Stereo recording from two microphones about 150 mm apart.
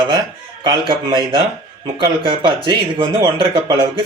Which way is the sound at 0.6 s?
30° right (ahead or behind).